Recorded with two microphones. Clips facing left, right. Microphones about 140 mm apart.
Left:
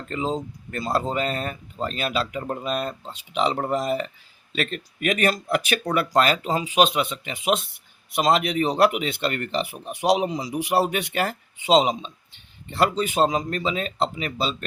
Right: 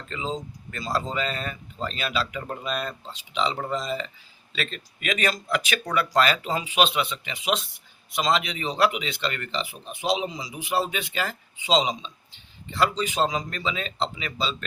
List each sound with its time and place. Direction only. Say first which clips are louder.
0.1 s speech: left 5 dB; 55° left (ahead or behind)
9.9 s speech: left 5 dB; 70° left (ahead or behind); by 14.5 s 50° left (ahead or behind)